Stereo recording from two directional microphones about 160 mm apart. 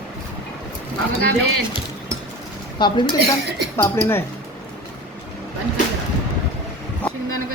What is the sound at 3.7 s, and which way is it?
Speech, 15° left (ahead or behind).